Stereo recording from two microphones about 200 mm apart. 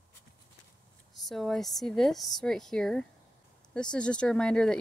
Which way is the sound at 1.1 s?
Centre (ahead or behind).